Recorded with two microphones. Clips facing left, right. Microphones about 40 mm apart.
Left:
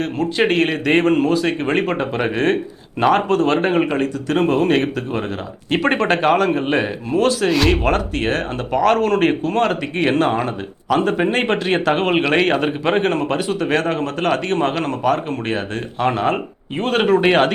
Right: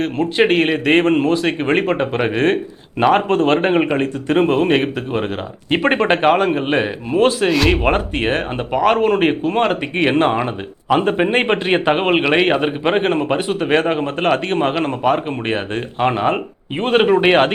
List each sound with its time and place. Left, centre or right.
0.0 s speech: right